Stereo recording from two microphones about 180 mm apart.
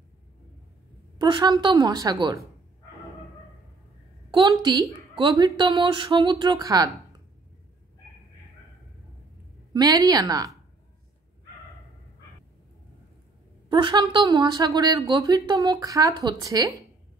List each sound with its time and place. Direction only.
1.1 s speech: 25° right (ahead or behind)
4.3 s speech: 25° right (ahead or behind)
9.8 s speech: 20° right (ahead or behind)
13.7 s a woman's voice: 25° right (ahead or behind)